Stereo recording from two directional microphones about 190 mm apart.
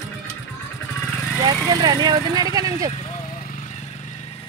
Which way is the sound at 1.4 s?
20° right (ahead or behind).